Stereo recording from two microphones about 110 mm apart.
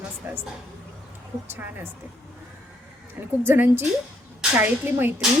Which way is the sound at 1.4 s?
20° right (ahead or behind).